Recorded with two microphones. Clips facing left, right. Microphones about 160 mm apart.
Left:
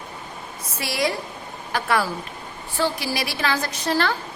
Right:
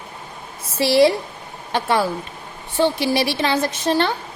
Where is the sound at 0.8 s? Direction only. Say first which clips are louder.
Right 10 dB; 30° right (ahead or behind).